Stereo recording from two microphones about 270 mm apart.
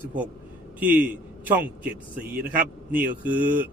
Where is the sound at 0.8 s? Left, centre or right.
Centre.